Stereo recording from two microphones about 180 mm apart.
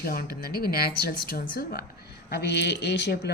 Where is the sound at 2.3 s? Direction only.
65° left (ahead or behind).